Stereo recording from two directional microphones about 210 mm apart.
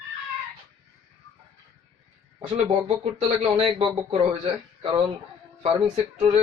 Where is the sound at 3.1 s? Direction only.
25° right (ahead or behind).